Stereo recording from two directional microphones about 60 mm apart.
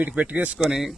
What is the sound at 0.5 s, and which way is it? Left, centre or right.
Speech, centre.